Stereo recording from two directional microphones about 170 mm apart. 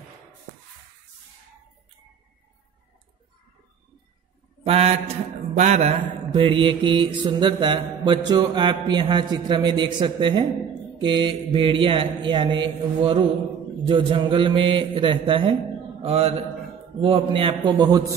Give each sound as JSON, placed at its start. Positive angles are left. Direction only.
{"t": 4.6, "sound": "a man's voice", "side_deg": -35}
{"t": 5.6, "sound": "mantra", "side_deg": -40}
{"t": 16.0, "sound": "a man's voice", "side_deg": -35}